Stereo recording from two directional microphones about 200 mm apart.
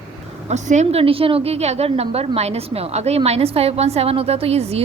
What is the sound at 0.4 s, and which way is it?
A woman's voice, 35° right (ahead or behind).